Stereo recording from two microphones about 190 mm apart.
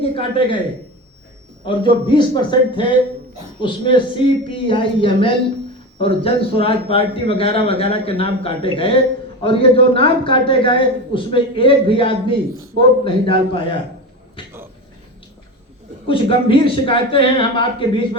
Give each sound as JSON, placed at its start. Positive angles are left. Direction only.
{"t": 0.0, "sound": "a man's voice", "side_deg": 30}
{"t": 1.6, "sound": "a man's voice", "side_deg": 25}
{"t": 16.0, "sound": "a man's voice", "side_deg": 25}